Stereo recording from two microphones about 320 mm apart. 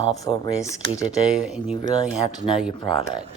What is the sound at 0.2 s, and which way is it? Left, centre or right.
Speech, centre.